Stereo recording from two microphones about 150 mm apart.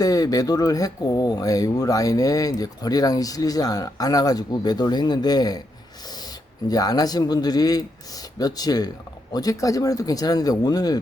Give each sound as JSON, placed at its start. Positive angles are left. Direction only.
{"t": 0.0, "sound": "speech", "side_deg": 25}
{"t": 6.7, "sound": "speech", "side_deg": 25}